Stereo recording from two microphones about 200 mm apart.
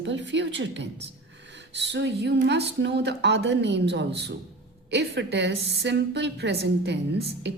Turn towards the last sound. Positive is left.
turn(degrees=-60)  # may be behind; listen again after turning